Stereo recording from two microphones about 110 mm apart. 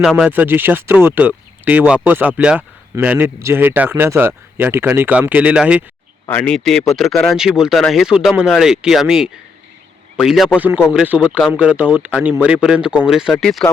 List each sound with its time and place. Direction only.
0.0 s speech: 5° right (ahead or behind)
0.3 s speech: 15° right (ahead or behind)
6.2 s speech: 15° left (ahead or behind)